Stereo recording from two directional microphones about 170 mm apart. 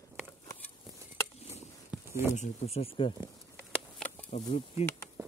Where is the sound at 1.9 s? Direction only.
10° right (ahead or behind).